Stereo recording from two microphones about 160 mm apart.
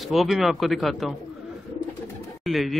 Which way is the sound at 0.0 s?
Centre (ahead or behind).